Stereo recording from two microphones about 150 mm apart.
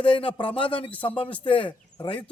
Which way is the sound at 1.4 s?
35° left (ahead or behind).